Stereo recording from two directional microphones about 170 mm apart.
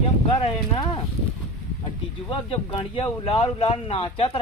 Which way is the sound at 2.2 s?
30° left (ahead or behind).